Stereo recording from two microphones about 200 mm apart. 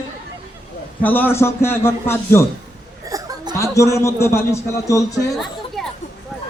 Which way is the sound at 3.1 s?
20° right (ahead or behind).